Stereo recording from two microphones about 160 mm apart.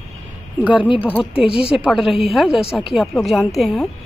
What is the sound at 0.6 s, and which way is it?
Speech, 5° right (ahead or behind).